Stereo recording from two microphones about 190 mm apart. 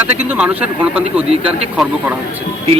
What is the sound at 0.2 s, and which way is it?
A man's voice, 10° right (ahead or behind).